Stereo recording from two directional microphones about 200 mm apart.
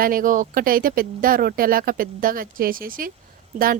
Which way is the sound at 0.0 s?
45° right (ahead or behind).